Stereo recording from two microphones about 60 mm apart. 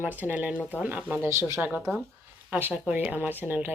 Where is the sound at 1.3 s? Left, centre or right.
Right.